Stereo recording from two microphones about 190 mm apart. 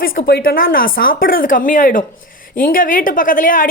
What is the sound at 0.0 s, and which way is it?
A woman's voice, 50° left (ahead or behind).